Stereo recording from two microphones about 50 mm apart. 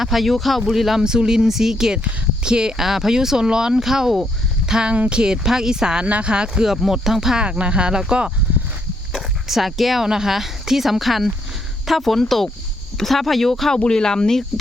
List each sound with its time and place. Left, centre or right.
0.0 s speech: centre
6.1 s speech: right; by 7.4 s centre
7.4 s speech: right
9.1 s speech: centre